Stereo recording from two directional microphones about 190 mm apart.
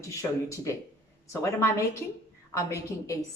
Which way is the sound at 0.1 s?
15° left (ahead or behind).